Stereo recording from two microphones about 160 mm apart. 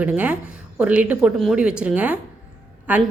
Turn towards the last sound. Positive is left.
turn(degrees=-10)  # may be behind; listen again after turning